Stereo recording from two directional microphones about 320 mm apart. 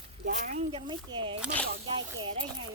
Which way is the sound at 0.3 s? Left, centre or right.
Right.